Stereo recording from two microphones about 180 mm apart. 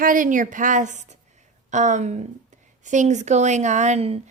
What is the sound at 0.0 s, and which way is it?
A woman's voice, 45° right (ahead or behind).